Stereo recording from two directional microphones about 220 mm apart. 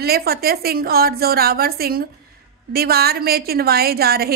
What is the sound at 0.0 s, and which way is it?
A woman's voice, 45° right (ahead or behind).